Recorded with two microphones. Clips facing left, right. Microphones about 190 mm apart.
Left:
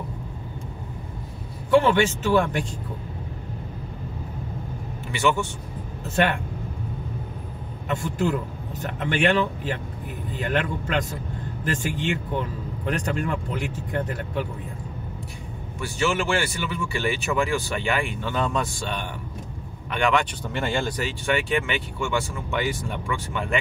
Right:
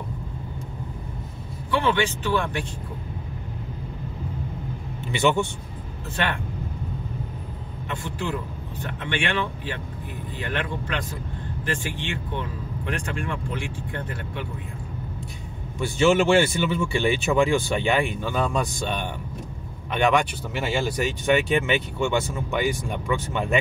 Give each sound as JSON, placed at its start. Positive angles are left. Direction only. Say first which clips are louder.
{"t": 1.7, "sound": "speech", "louder": "left 5 dB", "side_deg": 45}
{"t": 5.1, "sound": "speech", "louder": "right 2 dB", "side_deg": -25}
{"t": 8.0, "sound": "speech", "louder": "left 5 dB", "side_deg": 45}
{"t": 15.8, "sound": "speech", "louder": "right 6 dB", "side_deg": -25}
{"t": 20.5, "sound": "speech", "louder": "right 1 dB", "side_deg": -5}